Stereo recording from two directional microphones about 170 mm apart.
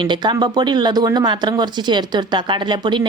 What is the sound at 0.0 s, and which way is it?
A woman's voice, 25° right (ahead or behind).